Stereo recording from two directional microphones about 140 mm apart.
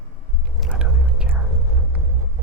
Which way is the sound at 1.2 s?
10° right (ahead or behind).